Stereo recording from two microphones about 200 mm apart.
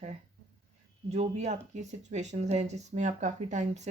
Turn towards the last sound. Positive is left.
turn(degrees=-35)  # may be behind; listen again after turning